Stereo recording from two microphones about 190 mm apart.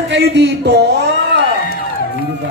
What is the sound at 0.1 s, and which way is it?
Speech, 65° right (ahead or behind).